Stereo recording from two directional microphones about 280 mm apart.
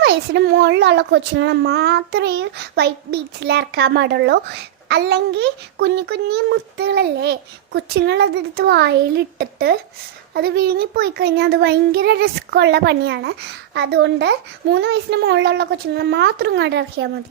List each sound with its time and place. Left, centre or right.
0.0 s a child's voice: right